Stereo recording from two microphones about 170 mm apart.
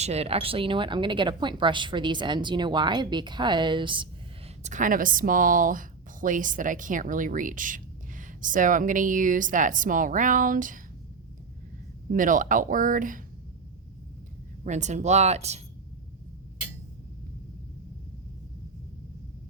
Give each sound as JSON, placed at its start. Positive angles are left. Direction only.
{"t": 0.0, "sound": "a woman's voice", "side_deg": -40}
{"t": 4.6, "sound": "speech", "side_deg": -50}
{"t": 12.1, "sound": "speech", "side_deg": -50}
{"t": 14.6, "sound": "speech", "side_deg": -45}